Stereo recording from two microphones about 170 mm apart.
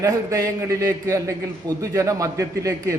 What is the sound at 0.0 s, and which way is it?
A man's voice, 20° right (ahead or behind).